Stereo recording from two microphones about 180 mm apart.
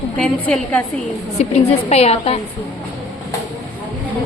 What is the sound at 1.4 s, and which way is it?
A woman's voice, 35° left (ahead or behind).